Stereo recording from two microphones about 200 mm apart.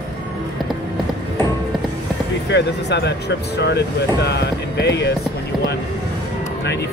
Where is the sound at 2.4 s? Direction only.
60° left (ahead or behind).